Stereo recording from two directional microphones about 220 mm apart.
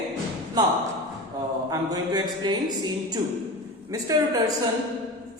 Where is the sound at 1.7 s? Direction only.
15° right (ahead or behind).